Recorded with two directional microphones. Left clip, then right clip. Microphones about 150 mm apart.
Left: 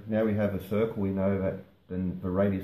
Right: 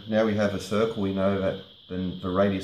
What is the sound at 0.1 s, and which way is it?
Speech, 5° left (ahead or behind).